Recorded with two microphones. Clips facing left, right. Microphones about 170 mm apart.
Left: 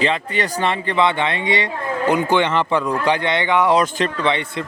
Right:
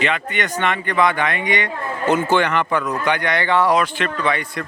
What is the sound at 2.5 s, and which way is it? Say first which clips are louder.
Speech: left 2 dB; 25° left (ahead or behind).